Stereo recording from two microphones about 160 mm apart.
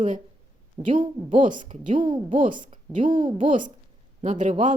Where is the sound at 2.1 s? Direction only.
30° right (ahead or behind).